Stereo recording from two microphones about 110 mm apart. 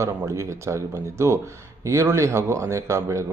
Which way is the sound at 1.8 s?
25° right (ahead or behind).